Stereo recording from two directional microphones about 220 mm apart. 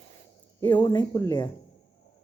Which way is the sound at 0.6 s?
10° left (ahead or behind).